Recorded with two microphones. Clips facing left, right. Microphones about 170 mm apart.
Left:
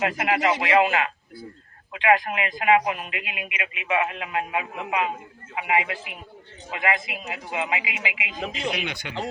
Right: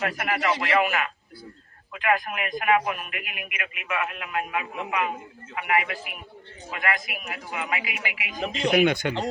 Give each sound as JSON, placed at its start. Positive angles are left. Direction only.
{"t": 0.0, "sound": "speech", "side_deg": 20}
{"t": 8.4, "sound": "speech", "side_deg": 0}
{"t": 8.7, "sound": "speech", "side_deg": -50}